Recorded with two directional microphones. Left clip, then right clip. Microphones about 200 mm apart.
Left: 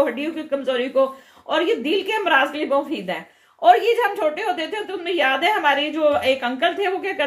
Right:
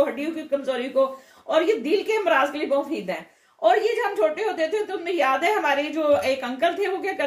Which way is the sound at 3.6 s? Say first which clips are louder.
Left 5 dB; 45° left (ahead or behind).